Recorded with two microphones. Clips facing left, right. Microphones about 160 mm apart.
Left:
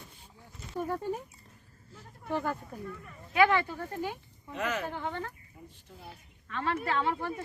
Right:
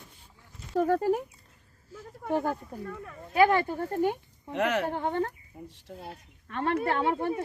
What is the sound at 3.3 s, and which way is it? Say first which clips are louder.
Speech: right 3 dB; 40° right (ahead or behind).